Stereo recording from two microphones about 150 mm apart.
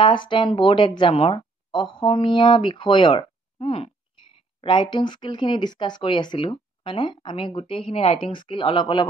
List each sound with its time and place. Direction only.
0.0 s speech: 35° left (ahead or behind)